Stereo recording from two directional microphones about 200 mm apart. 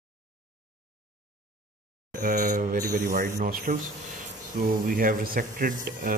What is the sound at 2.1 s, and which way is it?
Speech, 40° right (ahead or behind).